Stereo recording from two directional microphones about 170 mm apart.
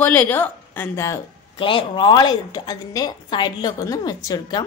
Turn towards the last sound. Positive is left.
turn(degrees=25)  # may be behind; listen again after turning